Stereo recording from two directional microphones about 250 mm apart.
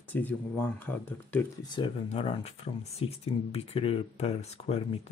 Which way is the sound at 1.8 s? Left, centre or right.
Left.